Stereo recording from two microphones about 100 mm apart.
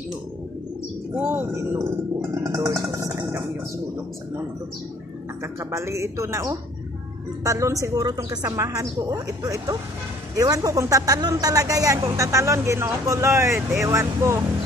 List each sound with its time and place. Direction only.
1.1 s speech: 15° right (ahead or behind)
2.3 s speech: 35° right (ahead or behind)
3.1 s a sound: 25° right (ahead or behind)
5.4 s speech: 30° right (ahead or behind)